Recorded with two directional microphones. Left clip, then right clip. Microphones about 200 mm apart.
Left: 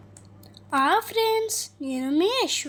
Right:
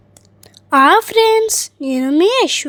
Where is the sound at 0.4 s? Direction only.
45° right (ahead or behind).